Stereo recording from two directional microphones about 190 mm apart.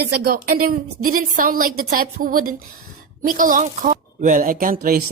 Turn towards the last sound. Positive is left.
turn(degrees=-50)  # may be behind; listen again after turning